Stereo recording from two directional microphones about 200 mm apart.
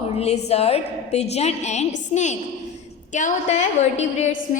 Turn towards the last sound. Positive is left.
turn(degrees=35)  # may be behind; listen again after turning